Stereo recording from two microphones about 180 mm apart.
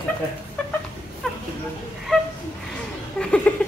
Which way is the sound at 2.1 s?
5° left (ahead or behind).